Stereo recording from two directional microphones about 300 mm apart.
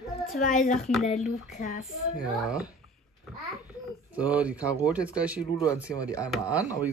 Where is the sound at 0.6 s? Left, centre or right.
Centre.